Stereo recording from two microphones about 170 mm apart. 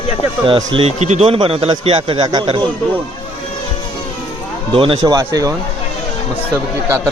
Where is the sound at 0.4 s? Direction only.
30° right (ahead or behind).